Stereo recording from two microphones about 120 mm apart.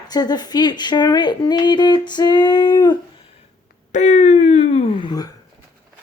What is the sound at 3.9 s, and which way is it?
Speech, 90° left.